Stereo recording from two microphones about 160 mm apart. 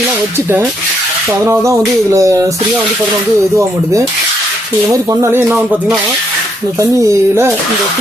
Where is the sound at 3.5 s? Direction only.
20° right (ahead or behind).